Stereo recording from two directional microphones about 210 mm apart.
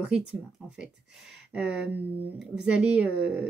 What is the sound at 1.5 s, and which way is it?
Speech, 5° right (ahead or behind).